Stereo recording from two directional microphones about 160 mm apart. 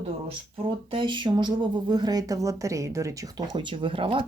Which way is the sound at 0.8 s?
30° right (ahead or behind).